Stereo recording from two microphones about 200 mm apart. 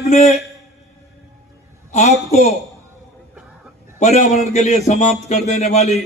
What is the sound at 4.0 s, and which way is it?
A man's voice, 35° left (ahead or behind).